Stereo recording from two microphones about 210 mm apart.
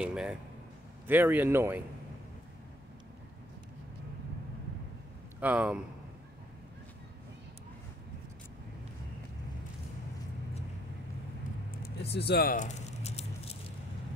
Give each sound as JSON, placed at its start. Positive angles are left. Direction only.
{"t": 0.0, "sound": "a man's voice", "side_deg": -5}
{"t": 5.4, "sound": "a man's voice", "side_deg": -5}
{"t": 11.7, "sound": "a sound", "side_deg": 50}